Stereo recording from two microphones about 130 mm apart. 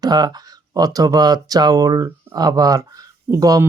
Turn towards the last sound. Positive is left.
turn(degrees=-25)  # may be behind; listen again after turning